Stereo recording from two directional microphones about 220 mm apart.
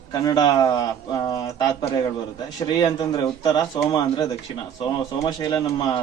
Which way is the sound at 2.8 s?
15° left (ahead or behind).